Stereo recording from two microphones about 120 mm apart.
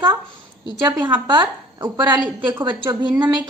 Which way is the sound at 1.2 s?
40° right (ahead or behind).